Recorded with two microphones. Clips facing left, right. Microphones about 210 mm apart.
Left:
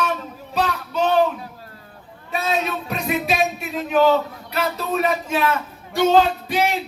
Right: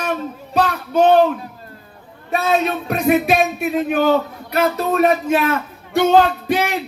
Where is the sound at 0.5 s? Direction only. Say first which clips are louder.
Right 5 dB; 55° right (ahead or behind).